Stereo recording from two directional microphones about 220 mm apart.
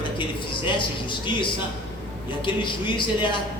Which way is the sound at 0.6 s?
20° left (ahead or behind).